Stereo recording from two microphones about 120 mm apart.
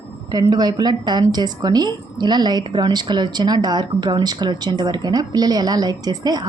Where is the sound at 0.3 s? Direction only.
35° right (ahead or behind).